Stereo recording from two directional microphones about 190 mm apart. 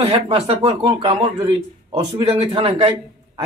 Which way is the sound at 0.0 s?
30° right (ahead or behind).